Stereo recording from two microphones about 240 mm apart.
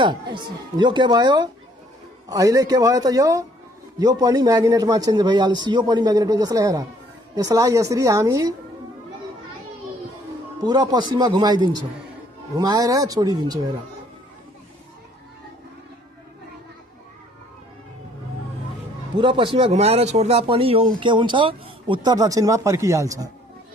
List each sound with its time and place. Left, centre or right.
0.0 s a man's voice: centre
10.6 s a man's voice: centre
19.1 s a man's voice: centre